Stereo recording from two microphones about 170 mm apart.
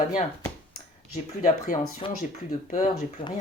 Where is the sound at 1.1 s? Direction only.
50° left (ahead or behind).